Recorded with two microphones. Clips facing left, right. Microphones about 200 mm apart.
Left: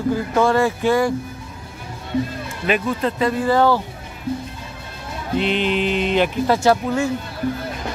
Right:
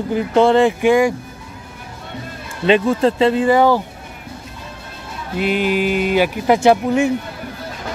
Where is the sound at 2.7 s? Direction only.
30° right (ahead or behind); by 3.8 s 15° right (ahead or behind).